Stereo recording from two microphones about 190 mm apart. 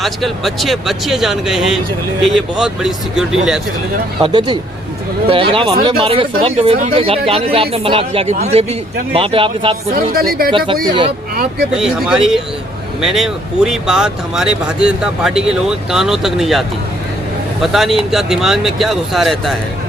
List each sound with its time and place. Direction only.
0.0 s speech: centre (ahead or behind)
4.2 s speech: 25° right (ahead or behind)
9.9 s speech: 50° right (ahead or behind)
11.7 s speech: 5° right (ahead or behind)